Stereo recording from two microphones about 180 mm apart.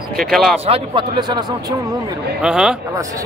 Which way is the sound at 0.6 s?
30° right (ahead or behind).